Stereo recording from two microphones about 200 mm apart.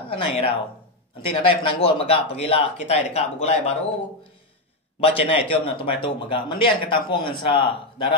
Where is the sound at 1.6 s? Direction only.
30° left (ahead or behind).